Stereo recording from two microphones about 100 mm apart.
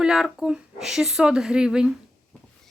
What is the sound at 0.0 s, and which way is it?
Speech, 5° right (ahead or behind).